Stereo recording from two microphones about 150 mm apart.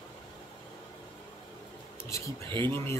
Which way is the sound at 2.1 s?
20° left (ahead or behind).